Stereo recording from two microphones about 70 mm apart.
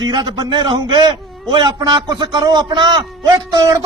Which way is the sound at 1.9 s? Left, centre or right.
Right.